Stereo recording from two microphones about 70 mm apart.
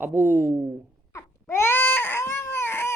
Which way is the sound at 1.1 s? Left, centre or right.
Left.